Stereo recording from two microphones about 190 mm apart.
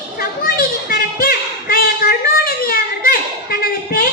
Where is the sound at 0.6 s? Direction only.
50° left (ahead or behind).